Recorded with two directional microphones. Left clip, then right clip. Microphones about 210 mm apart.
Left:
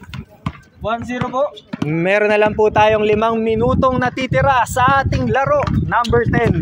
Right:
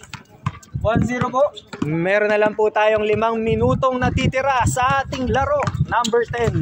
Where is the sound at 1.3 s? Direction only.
25° left (ahead or behind).